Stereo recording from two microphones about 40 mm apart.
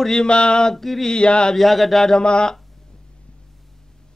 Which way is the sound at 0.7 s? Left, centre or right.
Centre.